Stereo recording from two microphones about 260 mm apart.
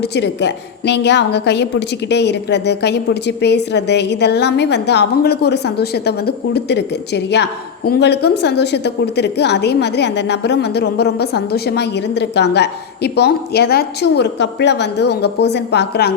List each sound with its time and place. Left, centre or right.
0.0 s a woman's voice: left